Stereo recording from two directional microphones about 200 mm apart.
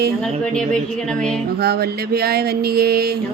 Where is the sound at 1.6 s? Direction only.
50° right (ahead or behind).